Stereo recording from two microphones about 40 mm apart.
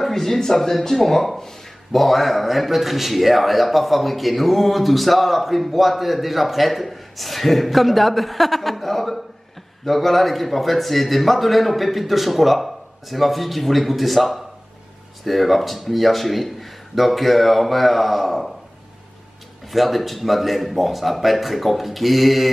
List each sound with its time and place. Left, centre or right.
0.0 s speech: centre
19.7 s speech: centre